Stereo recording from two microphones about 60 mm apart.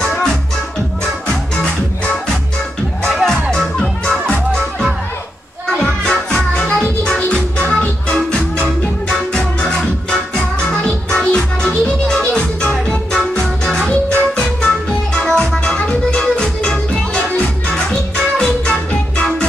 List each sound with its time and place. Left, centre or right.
0.0 s music: centre
3.0 s music: centre
7.5 s music: left